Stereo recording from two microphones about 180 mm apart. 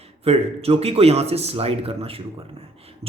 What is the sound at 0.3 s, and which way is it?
A man's voice, 35° right (ahead or behind).